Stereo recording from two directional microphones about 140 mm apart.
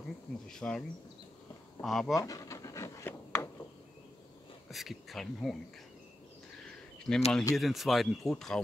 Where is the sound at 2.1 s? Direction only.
25° left (ahead or behind).